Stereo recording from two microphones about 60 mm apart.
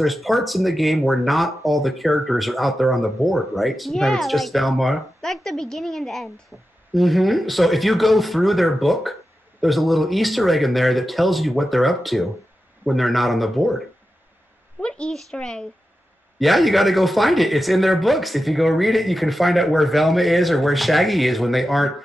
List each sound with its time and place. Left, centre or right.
0.0 s speech: centre
14.8 s a sound: centre
15.1 s speech: centre